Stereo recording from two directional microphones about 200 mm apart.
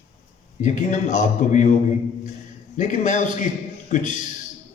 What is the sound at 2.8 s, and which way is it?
A man's voice, 40° left (ahead or behind).